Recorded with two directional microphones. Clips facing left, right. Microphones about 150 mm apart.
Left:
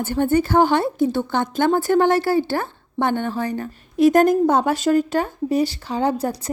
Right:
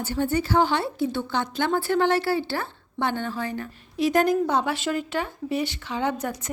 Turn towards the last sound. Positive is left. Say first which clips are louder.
# left 6 dB
turn(degrees=35)  # may be behind; listen again after turning